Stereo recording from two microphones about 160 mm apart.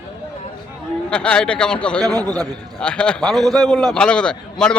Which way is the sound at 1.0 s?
5° left (ahead or behind).